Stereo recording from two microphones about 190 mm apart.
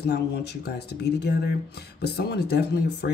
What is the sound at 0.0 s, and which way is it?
Speech, 60° left (ahead or behind).